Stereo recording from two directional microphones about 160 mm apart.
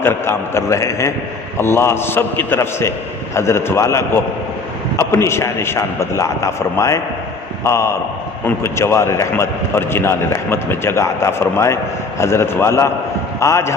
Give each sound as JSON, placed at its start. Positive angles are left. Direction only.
{"t": 0.0, "sound": "a man's voice", "side_deg": 15}